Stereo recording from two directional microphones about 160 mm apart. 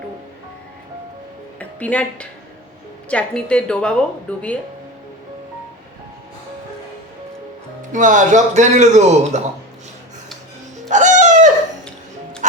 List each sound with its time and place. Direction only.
1.5 s a woman's voice: 10° left (ahead or behind)
7.8 s speech: 55° right (ahead or behind)
10.8 s music: 50° right (ahead or behind)